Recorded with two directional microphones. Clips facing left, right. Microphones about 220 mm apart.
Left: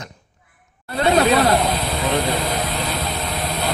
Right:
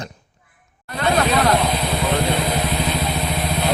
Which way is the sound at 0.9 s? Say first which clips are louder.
Left 3 dB; 30° left (ahead or behind).